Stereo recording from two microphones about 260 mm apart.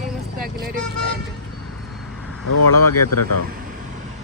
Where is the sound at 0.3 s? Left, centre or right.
Right.